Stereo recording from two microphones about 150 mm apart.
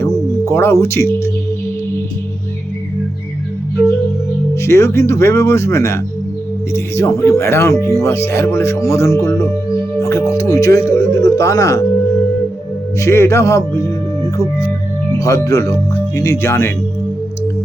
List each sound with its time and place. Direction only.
0.4 s speech: 20° left (ahead or behind)
4.6 s speech: 20° left (ahead or behind)
13.0 s speech: 20° left (ahead or behind)
15.2 s speech: 20° left (ahead or behind)